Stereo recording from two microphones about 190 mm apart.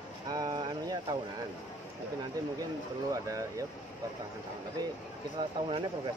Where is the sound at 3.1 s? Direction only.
15° right (ahead or behind).